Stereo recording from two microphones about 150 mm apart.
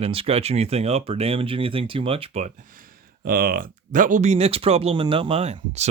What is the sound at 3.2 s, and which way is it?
Speech, 85° right.